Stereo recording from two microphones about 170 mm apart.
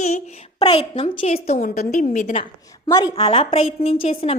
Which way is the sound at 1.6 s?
55° left (ahead or behind).